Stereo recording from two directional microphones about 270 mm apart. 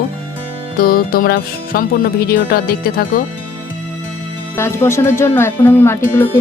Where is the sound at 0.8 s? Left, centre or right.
Left.